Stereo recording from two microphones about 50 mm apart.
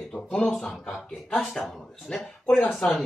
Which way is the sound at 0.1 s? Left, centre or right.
Centre.